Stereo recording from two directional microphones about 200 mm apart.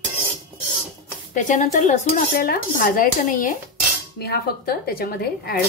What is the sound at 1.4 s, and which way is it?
A woman's voice, 40° left (ahead or behind).